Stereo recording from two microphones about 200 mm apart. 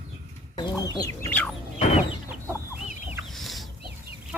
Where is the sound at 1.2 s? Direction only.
10° left (ahead or behind).